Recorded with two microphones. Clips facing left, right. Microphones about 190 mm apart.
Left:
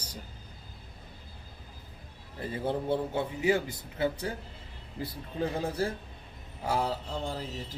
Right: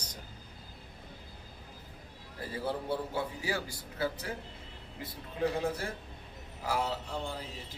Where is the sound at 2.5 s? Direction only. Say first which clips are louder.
Left 4 dB; 20° left (ahead or behind).